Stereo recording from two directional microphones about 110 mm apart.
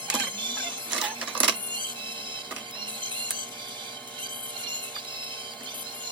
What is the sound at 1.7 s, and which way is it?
Printer, 45° right (ahead or behind).